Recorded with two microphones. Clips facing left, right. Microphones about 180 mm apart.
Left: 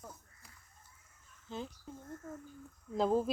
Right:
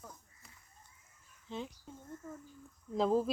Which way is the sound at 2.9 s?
Centre (ahead or behind).